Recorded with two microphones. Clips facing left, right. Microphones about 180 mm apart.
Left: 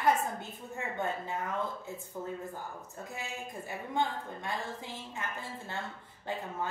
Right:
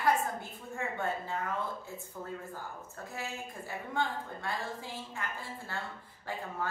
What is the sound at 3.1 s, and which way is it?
A woman's voice, 20° left (ahead or behind).